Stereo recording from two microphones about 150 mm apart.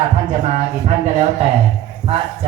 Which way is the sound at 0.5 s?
50° right (ahead or behind).